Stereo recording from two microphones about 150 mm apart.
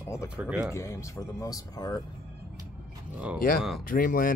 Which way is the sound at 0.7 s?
20° left (ahead or behind).